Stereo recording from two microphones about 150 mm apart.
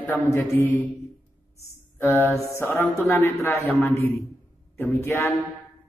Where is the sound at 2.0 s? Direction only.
20° left (ahead or behind).